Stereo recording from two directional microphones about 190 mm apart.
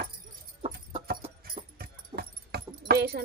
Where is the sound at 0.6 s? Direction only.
30° right (ahead or behind).